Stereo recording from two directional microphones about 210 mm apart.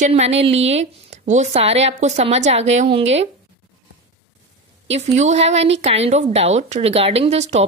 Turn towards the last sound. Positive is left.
turn(degrees=-30)  # may be behind; listen again after turning